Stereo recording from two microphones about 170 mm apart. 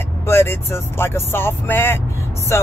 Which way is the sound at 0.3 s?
15° left (ahead or behind).